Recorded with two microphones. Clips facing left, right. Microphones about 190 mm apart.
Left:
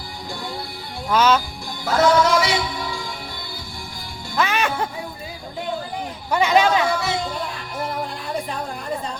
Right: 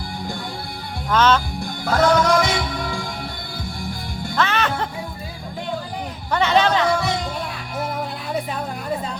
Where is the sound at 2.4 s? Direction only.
50° right (ahead or behind).